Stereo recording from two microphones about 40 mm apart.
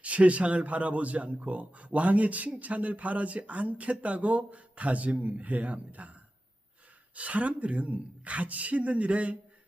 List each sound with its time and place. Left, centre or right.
0.0 s speech: right
7.2 s speech: right